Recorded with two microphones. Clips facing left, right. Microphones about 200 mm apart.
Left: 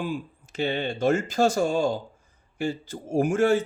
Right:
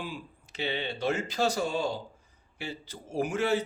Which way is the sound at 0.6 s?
45° left (ahead or behind).